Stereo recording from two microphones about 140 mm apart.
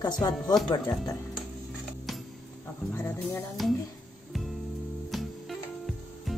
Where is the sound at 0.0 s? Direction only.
30° left (ahead or behind).